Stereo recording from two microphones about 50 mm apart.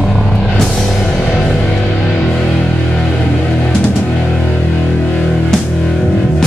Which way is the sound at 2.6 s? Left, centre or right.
Left.